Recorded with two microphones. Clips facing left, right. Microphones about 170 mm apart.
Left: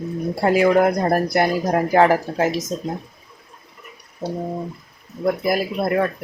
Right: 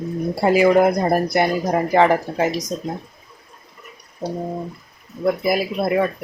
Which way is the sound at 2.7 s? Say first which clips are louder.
Even; 15° left (ahead or behind).